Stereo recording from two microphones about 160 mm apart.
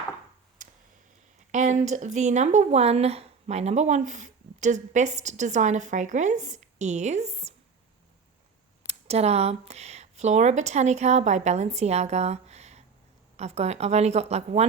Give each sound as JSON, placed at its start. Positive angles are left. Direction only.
{"t": 0.6, "sound": "tick", "side_deg": -55}
{"t": 1.5, "sound": "speech", "side_deg": -50}
{"t": 8.9, "sound": "speech", "side_deg": -40}